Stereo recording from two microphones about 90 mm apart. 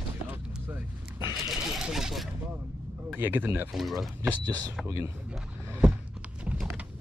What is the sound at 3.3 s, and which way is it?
Speech, 25° right (ahead or behind).